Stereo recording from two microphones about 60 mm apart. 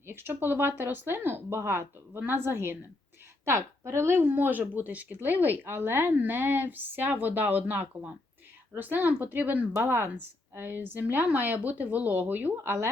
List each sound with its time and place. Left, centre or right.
0.1 s speech: right
2.1 s speech: right
9.7 s speech: right